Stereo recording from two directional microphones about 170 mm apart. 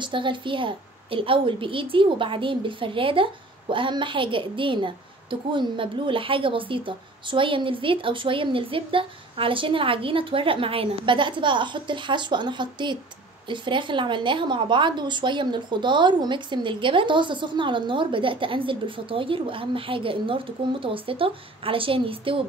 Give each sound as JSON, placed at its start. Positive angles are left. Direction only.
{"t": 0.0, "sound": "a woman's voice", "side_deg": -30}